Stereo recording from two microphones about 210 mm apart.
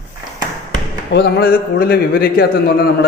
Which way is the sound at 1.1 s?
45° left (ahead or behind).